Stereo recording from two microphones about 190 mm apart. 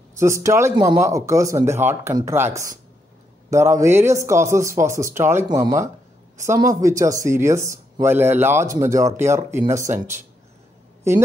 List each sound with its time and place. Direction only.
0.2 s speech: 15° right (ahead or behind)